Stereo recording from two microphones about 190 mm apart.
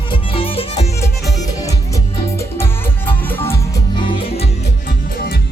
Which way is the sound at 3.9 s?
25° left (ahead or behind).